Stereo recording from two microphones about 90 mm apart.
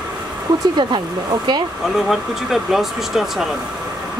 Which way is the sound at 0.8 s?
60° right (ahead or behind).